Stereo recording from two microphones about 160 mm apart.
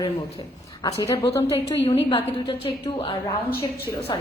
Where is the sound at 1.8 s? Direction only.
30° left (ahead or behind).